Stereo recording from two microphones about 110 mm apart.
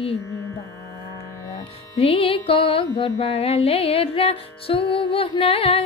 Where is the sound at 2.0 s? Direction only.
60° left (ahead or behind).